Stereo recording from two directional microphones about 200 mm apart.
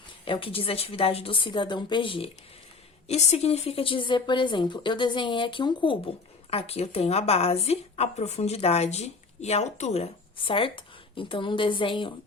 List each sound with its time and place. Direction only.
0.3 s a woman's voice: 25° left (ahead or behind)